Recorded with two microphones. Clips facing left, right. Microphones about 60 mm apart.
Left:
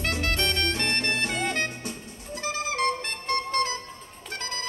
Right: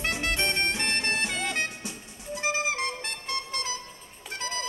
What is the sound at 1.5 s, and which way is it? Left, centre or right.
Music, left.